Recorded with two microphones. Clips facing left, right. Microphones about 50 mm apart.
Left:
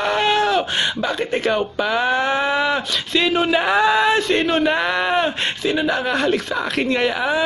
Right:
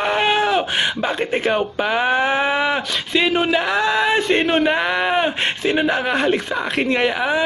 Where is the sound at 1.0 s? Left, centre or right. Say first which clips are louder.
Right 1 dB; right.